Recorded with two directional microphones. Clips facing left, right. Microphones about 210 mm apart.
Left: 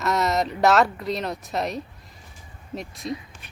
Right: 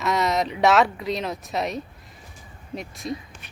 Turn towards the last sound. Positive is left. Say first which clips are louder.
# even
turn(degrees=0)  # may be behind; listen again after turning